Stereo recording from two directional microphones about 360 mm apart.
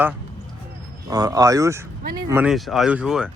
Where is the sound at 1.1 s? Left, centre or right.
Centre.